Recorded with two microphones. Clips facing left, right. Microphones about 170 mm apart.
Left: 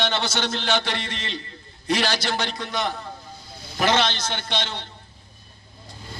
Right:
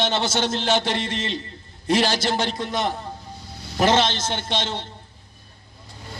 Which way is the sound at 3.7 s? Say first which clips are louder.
Right 3 dB; 30° right (ahead or behind).